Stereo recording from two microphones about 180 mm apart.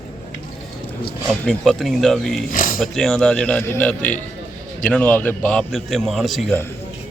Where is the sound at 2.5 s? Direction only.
50° left (ahead or behind).